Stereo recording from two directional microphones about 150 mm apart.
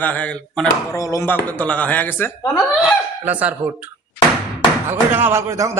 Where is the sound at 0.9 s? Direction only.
20° left (ahead or behind).